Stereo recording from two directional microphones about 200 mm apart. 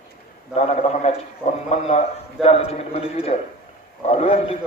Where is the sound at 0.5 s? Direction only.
35° left (ahead or behind).